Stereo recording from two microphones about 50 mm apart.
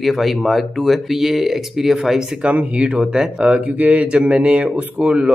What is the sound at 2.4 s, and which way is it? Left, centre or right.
Speech, right.